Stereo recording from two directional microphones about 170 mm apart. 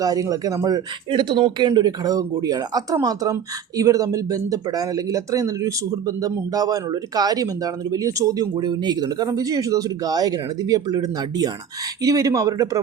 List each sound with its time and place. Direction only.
0.0 s speech: 20° right (ahead or behind)